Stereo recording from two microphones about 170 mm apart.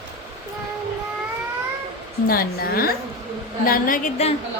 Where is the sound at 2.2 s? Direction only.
60° left (ahead or behind).